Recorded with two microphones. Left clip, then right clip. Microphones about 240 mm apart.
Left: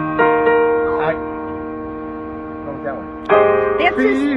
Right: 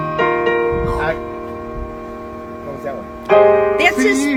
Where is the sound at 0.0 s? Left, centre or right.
Right.